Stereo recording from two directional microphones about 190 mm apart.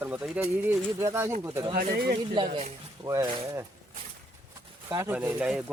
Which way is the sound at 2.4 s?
30° right (ahead or behind).